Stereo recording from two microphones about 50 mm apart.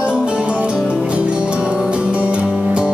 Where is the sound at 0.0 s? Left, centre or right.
Right.